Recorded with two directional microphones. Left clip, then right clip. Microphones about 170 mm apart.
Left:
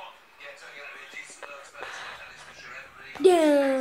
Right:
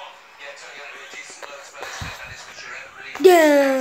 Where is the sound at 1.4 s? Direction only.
20° right (ahead or behind).